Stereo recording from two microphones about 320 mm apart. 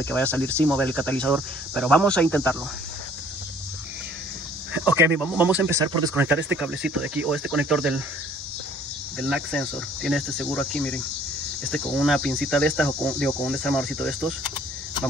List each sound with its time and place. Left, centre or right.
0.0 s cricket: centre
4.7 s cricket: centre
9.2 s cricket: centre